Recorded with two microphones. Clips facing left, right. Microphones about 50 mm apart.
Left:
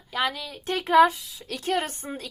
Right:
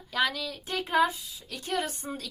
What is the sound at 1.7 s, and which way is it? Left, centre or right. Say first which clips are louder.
Speech: left 3 dB; left.